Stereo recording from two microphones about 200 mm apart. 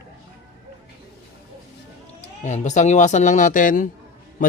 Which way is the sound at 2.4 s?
35° left (ahead or behind).